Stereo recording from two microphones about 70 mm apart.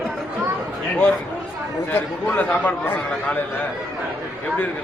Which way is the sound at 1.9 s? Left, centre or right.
Left.